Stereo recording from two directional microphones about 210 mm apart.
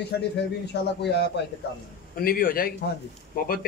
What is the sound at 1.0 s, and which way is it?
Speech, 55° left (ahead or behind).